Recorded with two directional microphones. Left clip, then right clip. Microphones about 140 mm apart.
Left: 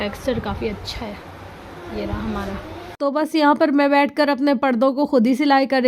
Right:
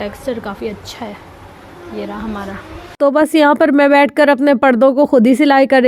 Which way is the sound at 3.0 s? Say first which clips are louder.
Right 8 dB; 30° right (ahead or behind).